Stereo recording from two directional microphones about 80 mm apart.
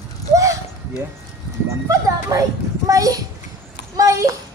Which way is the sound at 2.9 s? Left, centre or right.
Right.